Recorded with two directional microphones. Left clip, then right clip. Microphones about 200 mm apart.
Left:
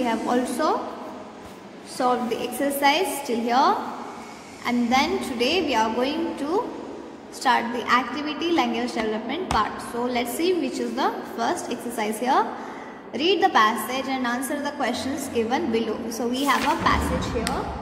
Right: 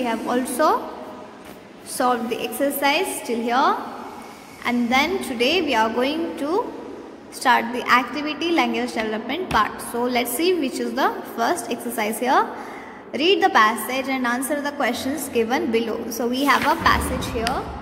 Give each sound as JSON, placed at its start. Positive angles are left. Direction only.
{"t": 0.0, "sound": "a woman's voice", "side_deg": -10}
{"t": 2.0, "sound": "a woman's voice", "side_deg": -20}